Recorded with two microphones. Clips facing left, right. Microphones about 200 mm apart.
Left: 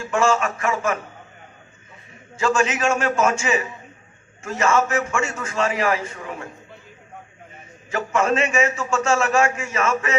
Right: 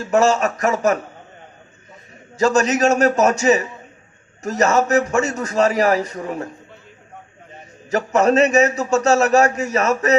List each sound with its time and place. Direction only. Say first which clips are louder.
0.0 s a man's voice: right 4 dB; 40° right (ahead or behind)
2.4 s a man's voice: right 5 dB; 40° right (ahead or behind)
7.5 s a man's voice: right 6 dB; 40° right (ahead or behind)